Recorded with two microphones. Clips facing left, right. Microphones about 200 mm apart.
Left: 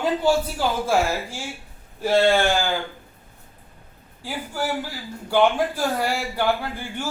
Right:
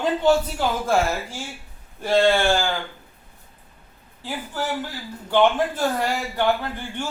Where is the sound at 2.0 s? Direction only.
10° left (ahead or behind).